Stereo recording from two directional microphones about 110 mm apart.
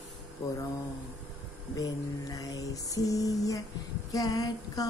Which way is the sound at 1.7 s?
35° left (ahead or behind).